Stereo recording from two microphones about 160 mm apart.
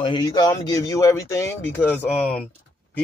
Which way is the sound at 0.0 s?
25° left (ahead or behind).